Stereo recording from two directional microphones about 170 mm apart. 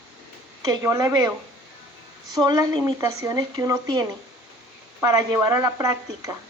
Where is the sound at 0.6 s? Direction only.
20° right (ahead or behind).